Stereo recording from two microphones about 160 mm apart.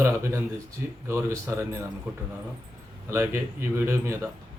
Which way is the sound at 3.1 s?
15° right (ahead or behind).